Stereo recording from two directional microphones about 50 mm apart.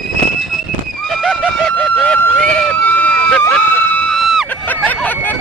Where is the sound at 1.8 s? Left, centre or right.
Left.